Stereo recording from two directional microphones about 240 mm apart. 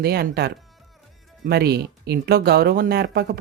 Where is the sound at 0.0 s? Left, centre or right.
Right.